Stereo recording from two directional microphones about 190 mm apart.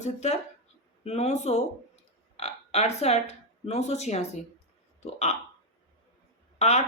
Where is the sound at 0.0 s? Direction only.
35° left (ahead or behind).